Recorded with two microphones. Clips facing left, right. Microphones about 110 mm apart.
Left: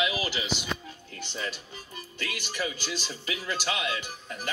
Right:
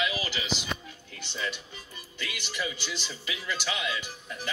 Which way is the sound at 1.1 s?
35° left (ahead or behind).